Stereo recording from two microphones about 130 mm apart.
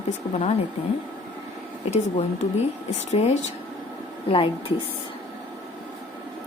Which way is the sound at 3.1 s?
55° left (ahead or behind).